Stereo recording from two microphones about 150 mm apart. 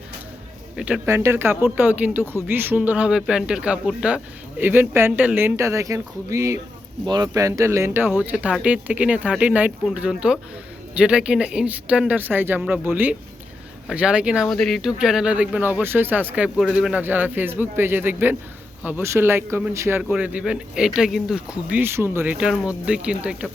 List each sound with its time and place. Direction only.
0.8 s speech: 5° right (ahead or behind)
1.0 s speech: 20° right (ahead or behind)